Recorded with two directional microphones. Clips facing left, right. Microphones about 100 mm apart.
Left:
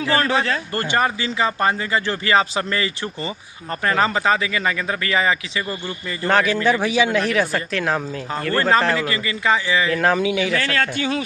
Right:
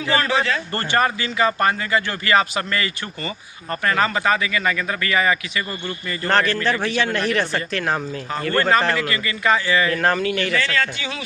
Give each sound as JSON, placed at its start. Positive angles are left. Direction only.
{"t": 0.2, "sound": "a man's voice", "side_deg": 35}
{"t": 0.7, "sound": "speech", "side_deg": 10}
{"t": 6.1, "sound": "speech", "side_deg": 5}
{"t": 9.0, "sound": "a man's voice", "side_deg": 20}
{"t": 9.9, "sound": "a man's voice", "side_deg": 0}
{"t": 10.5, "sound": "speech", "side_deg": 55}